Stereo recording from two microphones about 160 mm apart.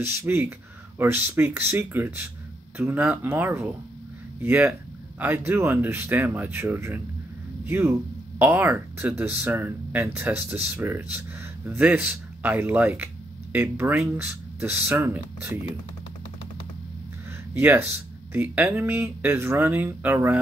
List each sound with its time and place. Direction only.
0.0 s speech: 15° right (ahead or behind)
17.6 s speech: 15° right (ahead or behind)